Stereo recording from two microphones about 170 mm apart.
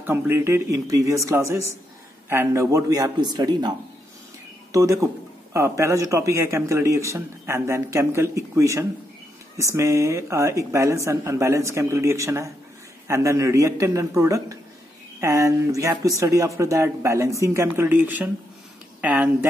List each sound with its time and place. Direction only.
0.0 s a man's voice: 15° right (ahead or behind)
4.7 s a man's voice: 20° right (ahead or behind)